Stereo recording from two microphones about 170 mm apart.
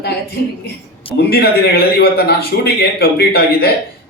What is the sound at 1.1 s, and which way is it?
Speech, 65° left (ahead or behind).